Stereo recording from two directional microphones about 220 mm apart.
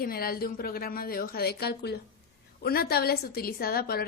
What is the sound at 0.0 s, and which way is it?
A woman's voice, 40° left (ahead or behind).